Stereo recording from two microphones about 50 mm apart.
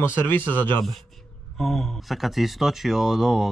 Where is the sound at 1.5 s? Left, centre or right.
Centre.